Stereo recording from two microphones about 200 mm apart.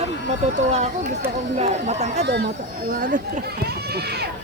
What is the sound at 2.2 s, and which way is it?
Speech, 55° right (ahead or behind).